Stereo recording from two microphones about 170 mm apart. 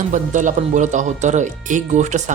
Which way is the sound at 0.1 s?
45° right (ahead or behind).